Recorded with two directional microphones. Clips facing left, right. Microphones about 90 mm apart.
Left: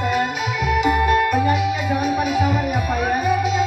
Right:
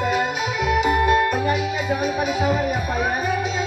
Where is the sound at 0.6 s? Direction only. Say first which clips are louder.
Left 1 dB; 20° right (ahead or behind).